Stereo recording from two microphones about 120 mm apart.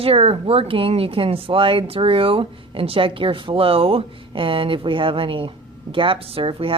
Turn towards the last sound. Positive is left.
turn(degrees=-50)  # may be behind; listen again after turning